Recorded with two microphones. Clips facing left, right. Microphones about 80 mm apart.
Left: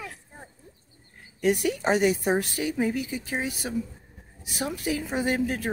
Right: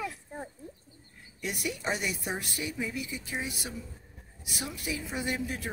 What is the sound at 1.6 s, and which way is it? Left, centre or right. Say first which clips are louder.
A woman's voice: left 6 dB; left.